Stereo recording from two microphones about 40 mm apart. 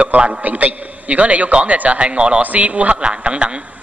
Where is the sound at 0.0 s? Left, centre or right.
Right.